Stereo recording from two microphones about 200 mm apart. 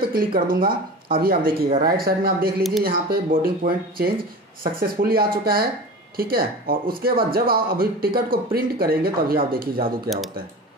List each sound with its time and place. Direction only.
0.0 s speech: 45° right (ahead or behind)